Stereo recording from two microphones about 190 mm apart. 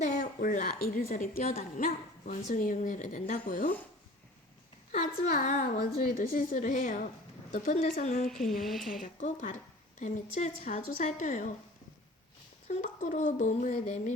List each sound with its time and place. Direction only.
0.1 s a woman's voice: 55° left (ahead or behind)
4.9 s a woman's voice: 45° left (ahead or behind)
8.2 s a woman's voice: centre (ahead or behind)
9.1 s a woman's voice: 45° left (ahead or behind)
12.6 s speech: 40° left (ahead or behind)